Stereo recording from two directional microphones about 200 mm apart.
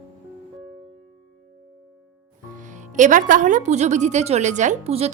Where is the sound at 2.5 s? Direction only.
40° right (ahead or behind).